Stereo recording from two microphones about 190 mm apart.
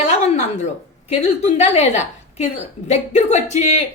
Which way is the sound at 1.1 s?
35° left (ahead or behind).